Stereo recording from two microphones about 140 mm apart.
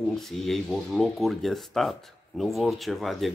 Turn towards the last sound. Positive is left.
turn(degrees=0)  # may be behind; listen again after turning